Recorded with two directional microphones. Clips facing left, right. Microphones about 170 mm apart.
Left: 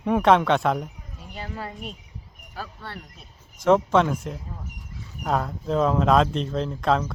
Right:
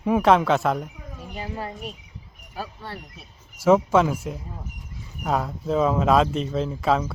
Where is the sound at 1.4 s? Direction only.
15° right (ahead or behind).